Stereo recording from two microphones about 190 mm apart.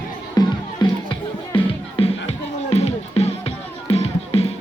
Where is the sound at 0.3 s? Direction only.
25° left (ahead or behind).